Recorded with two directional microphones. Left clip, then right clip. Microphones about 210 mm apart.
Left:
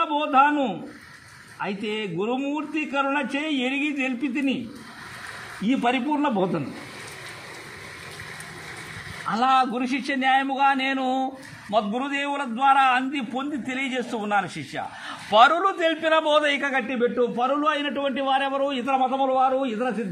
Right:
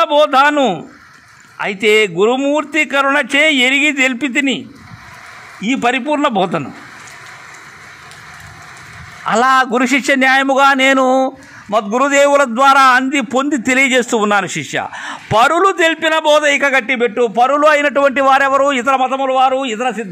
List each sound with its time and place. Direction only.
0.0 s a man's voice: 40° right (ahead or behind)
5.7 s a man's voice: 40° right (ahead or behind)
9.3 s a man's voice: 40° right (ahead or behind)
17.0 s a man's voice: 40° right (ahead or behind)